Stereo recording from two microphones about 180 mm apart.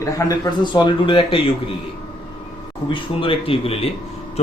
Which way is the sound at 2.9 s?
30° left (ahead or behind).